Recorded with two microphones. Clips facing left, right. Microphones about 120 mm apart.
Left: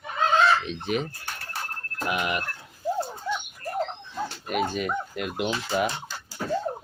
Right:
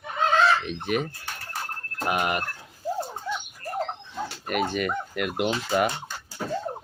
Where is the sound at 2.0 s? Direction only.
45° right (ahead or behind).